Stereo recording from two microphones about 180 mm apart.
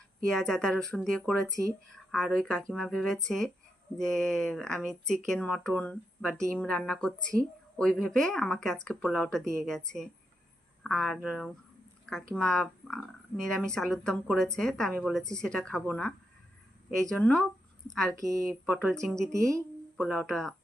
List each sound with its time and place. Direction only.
0.3 s speech: 5° left (ahead or behind)
18.1 s speech: 15° right (ahead or behind); by 19.3 s centre (ahead or behind)
19.3 s speech: 15° right (ahead or behind)
20.1 s speech: 5° left (ahead or behind)